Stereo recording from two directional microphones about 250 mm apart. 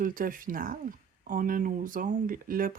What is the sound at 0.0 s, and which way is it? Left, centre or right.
Speech, right.